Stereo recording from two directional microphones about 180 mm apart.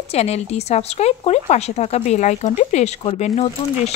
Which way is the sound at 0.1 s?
35° left (ahead or behind).